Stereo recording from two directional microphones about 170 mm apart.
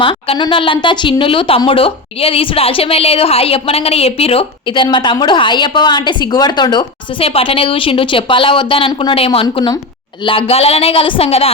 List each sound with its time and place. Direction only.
0.0 s a woman's voice: 30° left (ahead or behind)